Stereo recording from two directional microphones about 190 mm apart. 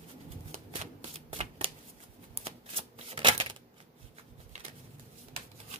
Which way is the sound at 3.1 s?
25° right (ahead or behind).